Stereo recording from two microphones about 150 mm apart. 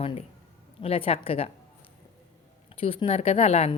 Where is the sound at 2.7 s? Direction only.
40° left (ahead or behind).